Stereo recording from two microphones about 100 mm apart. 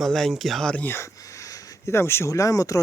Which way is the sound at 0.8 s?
25° left (ahead or behind).